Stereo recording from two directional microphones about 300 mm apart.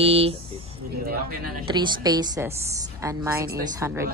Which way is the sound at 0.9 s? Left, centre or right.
Right.